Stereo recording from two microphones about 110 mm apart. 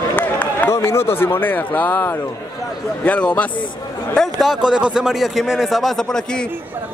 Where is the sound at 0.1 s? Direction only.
15° left (ahead or behind).